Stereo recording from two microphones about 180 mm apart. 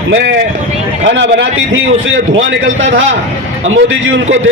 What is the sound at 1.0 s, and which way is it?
Speech, 90° right.